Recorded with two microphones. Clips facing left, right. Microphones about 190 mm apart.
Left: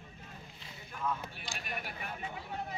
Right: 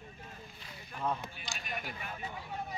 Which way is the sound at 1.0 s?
35° right (ahead or behind).